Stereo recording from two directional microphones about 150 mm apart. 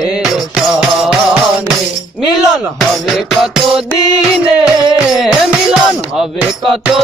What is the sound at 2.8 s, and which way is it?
Music, centre (ahead or behind).